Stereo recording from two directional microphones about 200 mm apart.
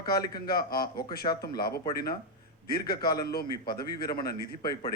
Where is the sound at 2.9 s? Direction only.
50° left (ahead or behind).